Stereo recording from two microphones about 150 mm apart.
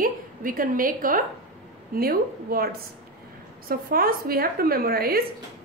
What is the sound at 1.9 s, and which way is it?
A woman's voice, 80° right.